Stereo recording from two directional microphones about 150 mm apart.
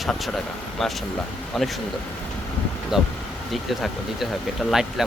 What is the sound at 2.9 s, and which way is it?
Speech, centre (ahead or behind).